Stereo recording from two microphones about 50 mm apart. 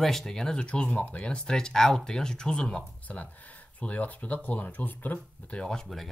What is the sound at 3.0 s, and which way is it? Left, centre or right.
Speech, left.